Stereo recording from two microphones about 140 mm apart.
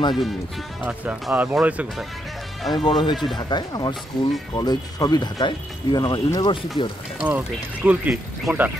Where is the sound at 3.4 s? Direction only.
30° left (ahead or behind).